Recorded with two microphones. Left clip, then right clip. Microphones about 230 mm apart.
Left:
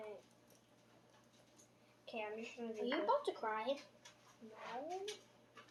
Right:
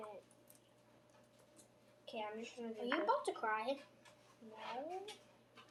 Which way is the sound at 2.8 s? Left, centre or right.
Centre.